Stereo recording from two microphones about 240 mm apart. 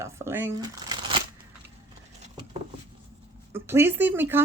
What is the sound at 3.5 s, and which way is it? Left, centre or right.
Speech, centre.